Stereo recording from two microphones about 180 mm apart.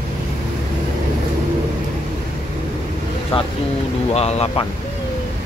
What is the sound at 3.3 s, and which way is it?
Speech, 30° left (ahead or behind).